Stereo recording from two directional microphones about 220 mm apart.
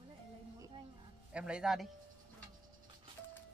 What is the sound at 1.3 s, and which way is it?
Speech, 5° right (ahead or behind).